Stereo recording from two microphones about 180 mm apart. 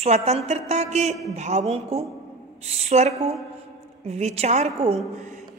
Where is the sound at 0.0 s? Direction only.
35° right (ahead or behind).